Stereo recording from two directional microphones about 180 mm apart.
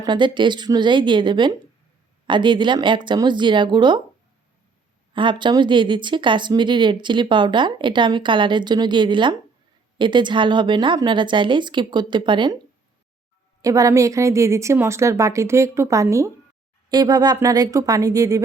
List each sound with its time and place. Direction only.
0.0 s speech: 25° right (ahead or behind)
5.1 s speech: 25° right (ahead or behind)
13.6 s a woman's voice: 20° right (ahead or behind)